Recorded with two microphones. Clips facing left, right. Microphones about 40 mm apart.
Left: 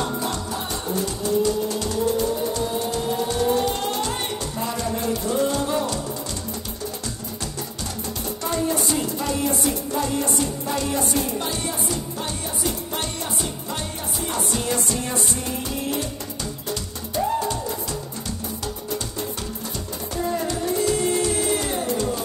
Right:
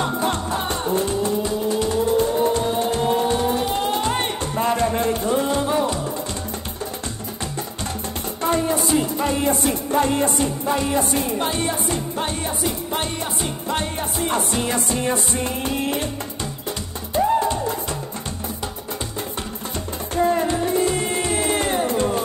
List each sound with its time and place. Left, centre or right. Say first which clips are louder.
0.0 s music: right 4 dB; right
2.1 s music: right 5 dB; right
3.4 s music: right 1 dB; centre
4.6 s music: right 8 dB; right
5.3 s music: even; right
8.4 s music: right 4 dB; right
10.6 s music: right 4 dB; right
17.1 s music: right 5 dB; right
20.2 s music: right 6 dB; right